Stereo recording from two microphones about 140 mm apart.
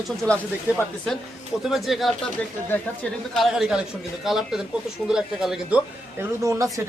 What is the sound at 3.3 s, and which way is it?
Speech, centre (ahead or behind).